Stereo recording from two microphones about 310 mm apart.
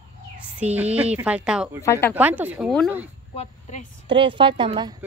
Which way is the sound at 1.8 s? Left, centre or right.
Centre.